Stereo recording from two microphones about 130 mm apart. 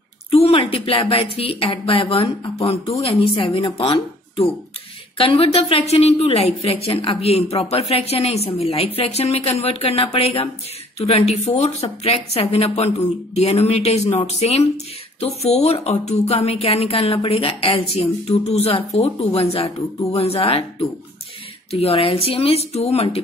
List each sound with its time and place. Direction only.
0.3 s a woman's voice: 50° left (ahead or behind)
21.7 s a woman's voice: 50° left (ahead or behind)